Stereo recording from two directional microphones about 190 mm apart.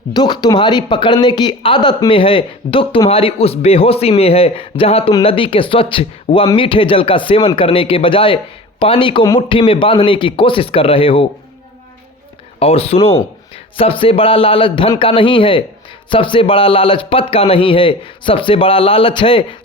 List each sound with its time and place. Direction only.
0.1 s speech: 20° left (ahead or behind)
12.5 s speech: 30° left (ahead or behind)